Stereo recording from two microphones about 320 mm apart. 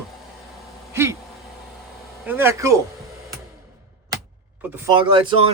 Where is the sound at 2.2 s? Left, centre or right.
Centre.